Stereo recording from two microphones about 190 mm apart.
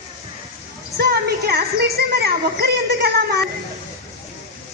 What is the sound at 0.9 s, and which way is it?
Speech, 55° right (ahead or behind).